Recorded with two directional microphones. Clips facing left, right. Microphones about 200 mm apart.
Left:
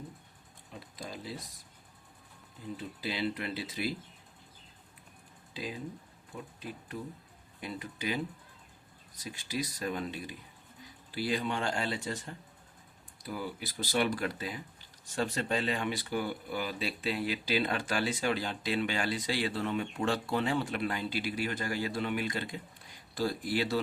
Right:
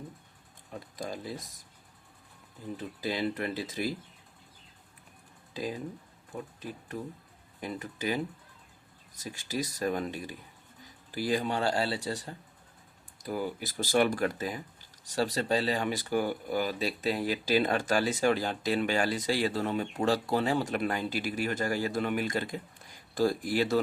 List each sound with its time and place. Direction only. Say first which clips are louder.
0.7 s a sound: right 5 dB; 45° right (ahead or behind)
3.0 s speech: right 3 dB; 45° right (ahead or behind)
5.5 s speech: right 4 dB; 45° right (ahead or behind)
13.1 s speech: right 5 dB; 45° right (ahead or behind)